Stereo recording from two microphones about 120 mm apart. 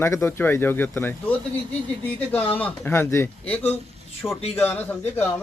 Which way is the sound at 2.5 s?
15° left (ahead or behind).